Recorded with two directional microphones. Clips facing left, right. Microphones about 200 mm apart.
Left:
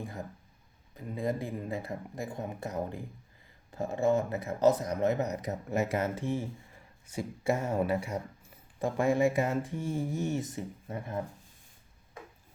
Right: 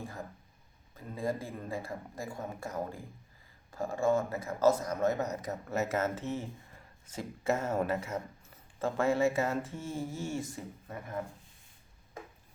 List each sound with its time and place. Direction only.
0.0 s speech: 20° left (ahead or behind)